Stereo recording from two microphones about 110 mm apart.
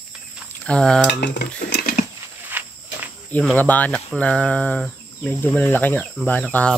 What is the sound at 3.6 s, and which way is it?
Speech, 15° left (ahead or behind).